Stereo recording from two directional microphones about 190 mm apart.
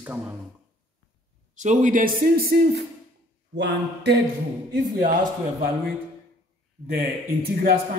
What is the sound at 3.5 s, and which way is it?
Mantra, 65° right (ahead or behind).